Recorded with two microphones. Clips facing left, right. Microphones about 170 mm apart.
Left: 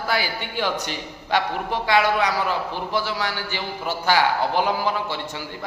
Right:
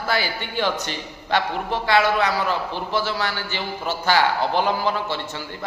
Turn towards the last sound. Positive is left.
turn(degrees=10)  # may be behind; listen again after turning